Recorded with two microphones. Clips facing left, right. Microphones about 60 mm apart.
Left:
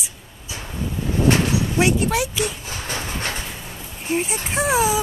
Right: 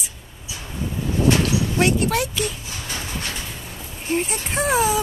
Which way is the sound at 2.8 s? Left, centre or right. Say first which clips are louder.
Left 3 dB; left.